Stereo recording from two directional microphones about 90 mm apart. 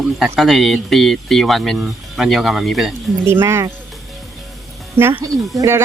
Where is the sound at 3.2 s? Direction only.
30° right (ahead or behind).